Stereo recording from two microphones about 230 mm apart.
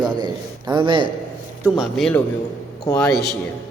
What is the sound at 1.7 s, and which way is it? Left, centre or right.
A man's voice, centre.